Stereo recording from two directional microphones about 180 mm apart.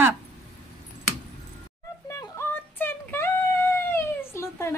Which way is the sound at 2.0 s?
15° left (ahead or behind).